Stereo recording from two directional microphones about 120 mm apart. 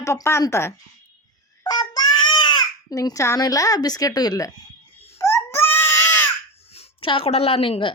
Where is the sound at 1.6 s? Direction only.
35° left (ahead or behind).